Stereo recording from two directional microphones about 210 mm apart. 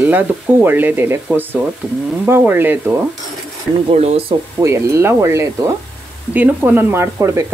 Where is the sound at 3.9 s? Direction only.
30° right (ahead or behind).